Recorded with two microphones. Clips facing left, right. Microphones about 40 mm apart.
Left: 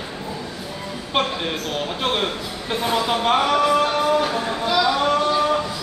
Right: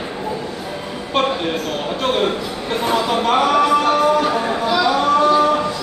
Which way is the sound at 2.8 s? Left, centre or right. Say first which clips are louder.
Right 2 dB; centre.